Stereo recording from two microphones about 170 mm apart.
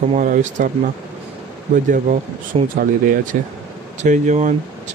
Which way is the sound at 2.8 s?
55° right (ahead or behind).